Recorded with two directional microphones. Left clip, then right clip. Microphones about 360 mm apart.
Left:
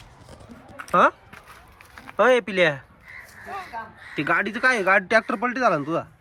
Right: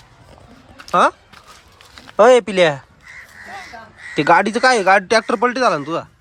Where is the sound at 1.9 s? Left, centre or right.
Centre.